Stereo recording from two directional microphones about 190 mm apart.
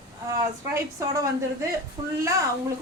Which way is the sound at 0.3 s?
15° right (ahead or behind).